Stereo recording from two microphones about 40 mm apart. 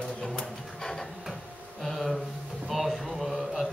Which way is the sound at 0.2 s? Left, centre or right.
Centre.